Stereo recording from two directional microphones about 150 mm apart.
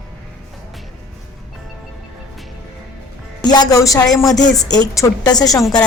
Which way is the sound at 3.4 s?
25° left (ahead or behind).